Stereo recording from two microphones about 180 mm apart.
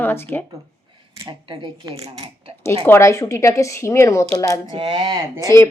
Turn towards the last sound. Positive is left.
turn(degrees=15)  # may be behind; listen again after turning